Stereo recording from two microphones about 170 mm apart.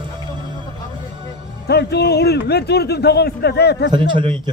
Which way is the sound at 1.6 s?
75° left (ahead or behind).